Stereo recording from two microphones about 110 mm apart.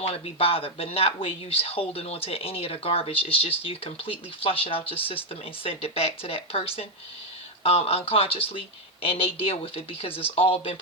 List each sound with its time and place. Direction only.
0.0 s speech: 65° left (ahead or behind)